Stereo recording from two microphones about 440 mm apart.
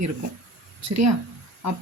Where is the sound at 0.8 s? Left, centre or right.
Right.